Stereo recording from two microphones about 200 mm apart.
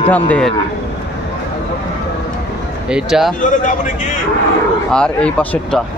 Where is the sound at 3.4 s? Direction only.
40° left (ahead or behind).